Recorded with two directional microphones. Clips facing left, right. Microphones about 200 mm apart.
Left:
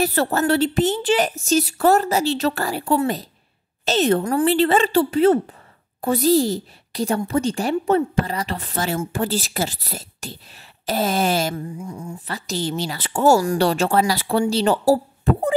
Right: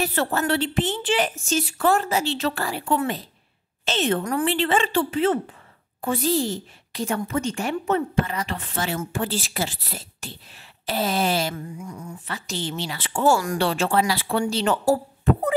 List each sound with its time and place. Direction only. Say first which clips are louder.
0.0 s a woman's voice: left 4 dB; 40° left (ahead or behind)
11.8 s a woman's voice: left 4 dB; 30° left (ahead or behind)